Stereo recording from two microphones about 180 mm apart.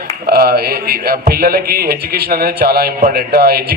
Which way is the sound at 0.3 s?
60° right (ahead or behind).